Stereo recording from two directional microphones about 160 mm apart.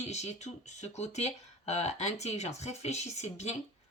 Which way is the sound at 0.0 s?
45° left (ahead or behind).